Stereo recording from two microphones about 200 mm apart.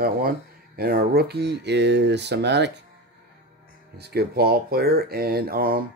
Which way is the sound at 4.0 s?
55° right (ahead or behind).